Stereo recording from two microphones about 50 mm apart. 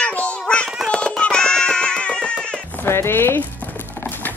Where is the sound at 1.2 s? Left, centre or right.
Centre.